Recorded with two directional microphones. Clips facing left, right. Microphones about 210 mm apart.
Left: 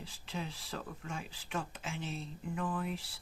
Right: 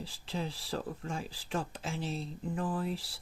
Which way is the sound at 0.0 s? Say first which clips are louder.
Right 4 dB; 35° right (ahead or behind).